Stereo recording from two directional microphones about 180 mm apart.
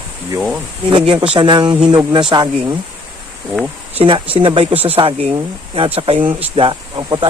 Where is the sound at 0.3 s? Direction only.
5° right (ahead or behind).